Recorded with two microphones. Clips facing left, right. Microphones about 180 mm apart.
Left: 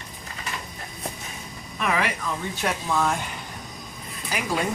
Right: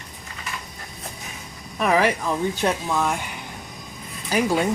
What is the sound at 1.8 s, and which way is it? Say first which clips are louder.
Speech: right 6 dB; 35° right (ahead or behind).